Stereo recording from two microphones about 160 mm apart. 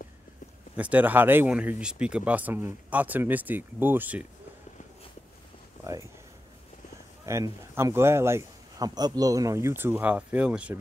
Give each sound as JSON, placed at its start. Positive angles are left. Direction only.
{"t": 0.7, "sound": "a man's voice", "side_deg": -10}
{"t": 7.2, "sound": "a man's voice", "side_deg": -20}